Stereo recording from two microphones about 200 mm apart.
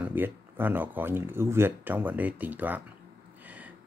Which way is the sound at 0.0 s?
10° right (ahead or behind).